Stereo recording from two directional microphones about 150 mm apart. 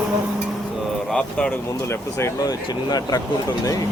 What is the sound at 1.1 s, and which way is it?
Speech, 5° left (ahead or behind).